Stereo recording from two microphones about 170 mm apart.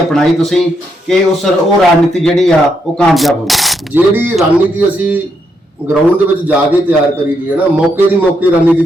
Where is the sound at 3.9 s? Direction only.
10° right (ahead or behind).